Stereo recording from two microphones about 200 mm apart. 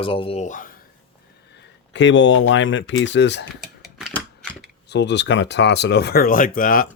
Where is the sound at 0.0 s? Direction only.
25° left (ahead or behind); by 0.8 s 40° left (ahead or behind).